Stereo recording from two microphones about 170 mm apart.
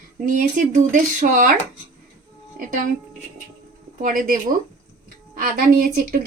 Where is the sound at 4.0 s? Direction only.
55° right (ahead or behind).